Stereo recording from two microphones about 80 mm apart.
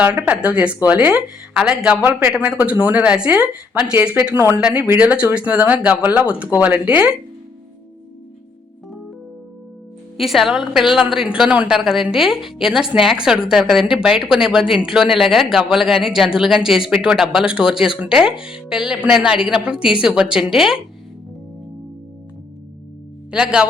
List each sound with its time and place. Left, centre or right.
0.0 s speech: centre
4.4 s speech: right
4.6 s speech: centre
10.2 s a woman's voice: centre
23.3 s speech: centre